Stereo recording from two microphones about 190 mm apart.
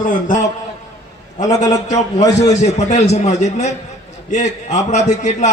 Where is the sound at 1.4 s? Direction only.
20° left (ahead or behind).